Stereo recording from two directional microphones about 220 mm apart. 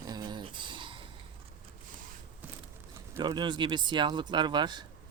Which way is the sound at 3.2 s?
20° right (ahead or behind).